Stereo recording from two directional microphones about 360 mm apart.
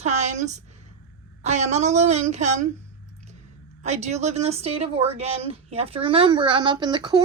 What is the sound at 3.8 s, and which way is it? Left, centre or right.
A woman's voice, centre.